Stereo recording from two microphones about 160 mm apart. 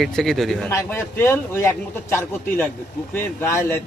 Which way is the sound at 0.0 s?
Centre (ahead or behind).